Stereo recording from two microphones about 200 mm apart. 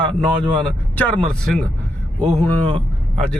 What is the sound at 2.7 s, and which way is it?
Vehicle, 25° right (ahead or behind).